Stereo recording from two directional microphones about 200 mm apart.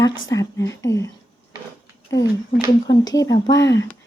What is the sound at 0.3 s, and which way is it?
Speech, 15° left (ahead or behind).